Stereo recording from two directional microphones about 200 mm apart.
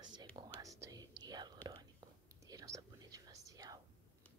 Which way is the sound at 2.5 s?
20° right (ahead or behind).